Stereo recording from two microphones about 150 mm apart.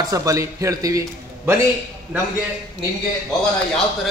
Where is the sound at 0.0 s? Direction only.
25° right (ahead or behind).